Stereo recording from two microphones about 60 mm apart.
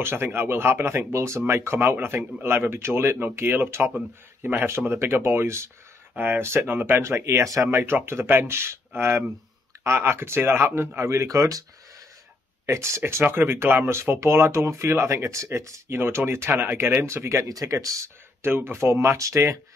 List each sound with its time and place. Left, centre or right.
0.0 s speech: right
6.1 s speech: right
7.0 s speech: right
11.2 s speech: right
12.6 s speech: right
13.2 s speech: right
15.9 s speech: right
17.5 s speech: right
18.0 s speech: right